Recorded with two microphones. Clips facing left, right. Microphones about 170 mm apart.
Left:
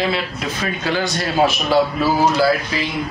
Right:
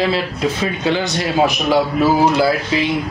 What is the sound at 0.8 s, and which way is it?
A man's voice, 20° right (ahead or behind).